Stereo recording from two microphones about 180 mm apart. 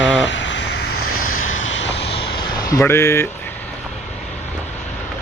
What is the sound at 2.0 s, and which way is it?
Vehicle, 35° left (ahead or behind).